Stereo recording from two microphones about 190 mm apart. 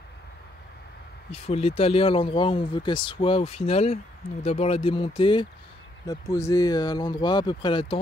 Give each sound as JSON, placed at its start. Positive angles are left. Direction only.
{"t": 1.3, "sound": "speech", "side_deg": 30}